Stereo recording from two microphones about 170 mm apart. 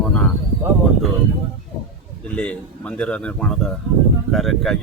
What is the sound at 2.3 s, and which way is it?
A man's voice, 5° left (ahead or behind).